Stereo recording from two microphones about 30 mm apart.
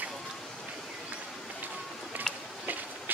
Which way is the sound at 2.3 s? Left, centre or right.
Left.